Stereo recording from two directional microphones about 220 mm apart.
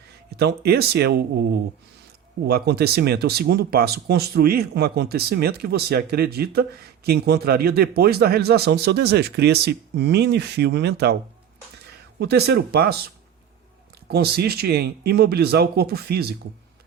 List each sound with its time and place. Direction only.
0.3 s speech: 45° right (ahead or behind)
12.2 s speech: 50° right (ahead or behind)
14.1 s speech: 45° right (ahead or behind)